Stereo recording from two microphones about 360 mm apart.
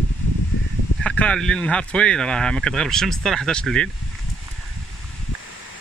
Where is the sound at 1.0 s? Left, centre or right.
Centre.